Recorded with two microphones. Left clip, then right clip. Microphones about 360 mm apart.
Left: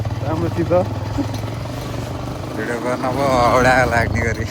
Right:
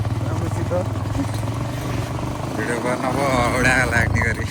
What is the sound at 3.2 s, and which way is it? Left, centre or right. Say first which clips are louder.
Speech: left 6 dB; centre.